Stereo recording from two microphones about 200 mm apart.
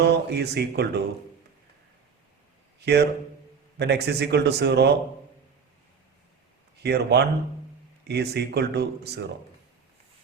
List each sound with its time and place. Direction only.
0.0 s speech: 55° right (ahead or behind)
2.8 s speech: 55° right (ahead or behind)
6.8 s speech: 55° right (ahead or behind)